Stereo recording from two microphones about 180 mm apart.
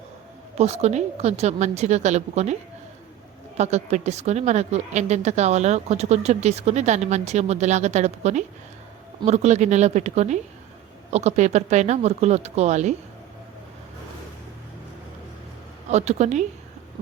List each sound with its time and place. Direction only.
0.5 s a woman's voice: 35° right (ahead or behind)
3.6 s a woman's voice: 40° right (ahead or behind)
15.9 s a woman's voice: 40° right (ahead or behind)